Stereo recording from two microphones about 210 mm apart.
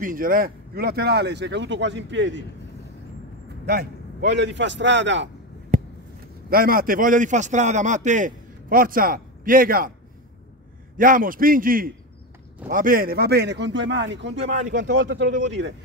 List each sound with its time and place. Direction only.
0.0 s speech: 40° right (ahead or behind); by 2.4 s 60° right (ahead or behind)
4.2 s a man's voice: 55° right (ahead or behind)
5.7 s a sound: 40° right (ahead or behind)
6.5 s a man's voice: 45° right (ahead or behind)
11.0 s a man's voice: 40° right (ahead or behind); by 15.7 s 55° right (ahead or behind)